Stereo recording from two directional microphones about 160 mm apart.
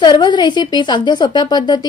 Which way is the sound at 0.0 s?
25° left (ahead or behind).